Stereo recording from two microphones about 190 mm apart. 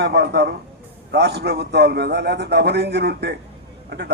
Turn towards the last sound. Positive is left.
turn(degrees=-60)  # may be behind; listen again after turning